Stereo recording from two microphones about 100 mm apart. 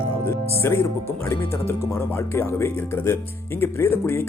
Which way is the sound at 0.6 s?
25° left (ahead or behind).